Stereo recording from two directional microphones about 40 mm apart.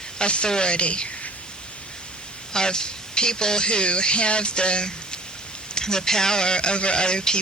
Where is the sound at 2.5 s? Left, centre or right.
Centre.